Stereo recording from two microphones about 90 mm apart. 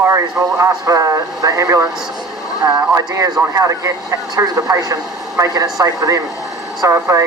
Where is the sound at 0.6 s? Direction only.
40° right (ahead or behind).